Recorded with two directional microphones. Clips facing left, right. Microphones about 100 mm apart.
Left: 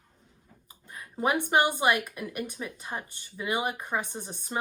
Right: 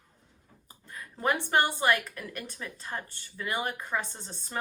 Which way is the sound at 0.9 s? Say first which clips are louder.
Left 2 dB; 15° left (ahead or behind).